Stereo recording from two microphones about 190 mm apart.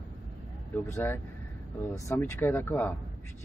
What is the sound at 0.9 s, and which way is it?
Speech, 10° left (ahead or behind).